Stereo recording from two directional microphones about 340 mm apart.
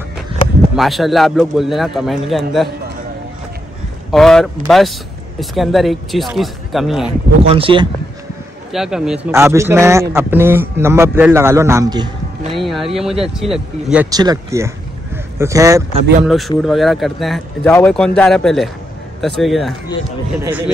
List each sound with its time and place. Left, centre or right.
0.7 s speech: centre
4.1 s speech: centre
7.4 s a man's voice: centre
8.7 s a man's voice: centre
12.5 s a man's voice: centre